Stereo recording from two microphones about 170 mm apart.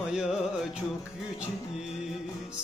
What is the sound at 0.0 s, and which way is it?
Music, 5° right (ahead or behind).